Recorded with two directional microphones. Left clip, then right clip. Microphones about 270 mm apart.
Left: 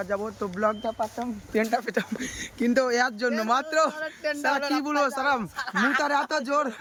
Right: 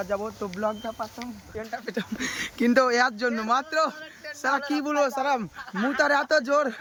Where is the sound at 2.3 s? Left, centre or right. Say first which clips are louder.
Right 3 dB; centre.